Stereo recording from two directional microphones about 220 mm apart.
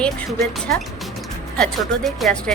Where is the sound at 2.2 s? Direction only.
Centre (ahead or behind).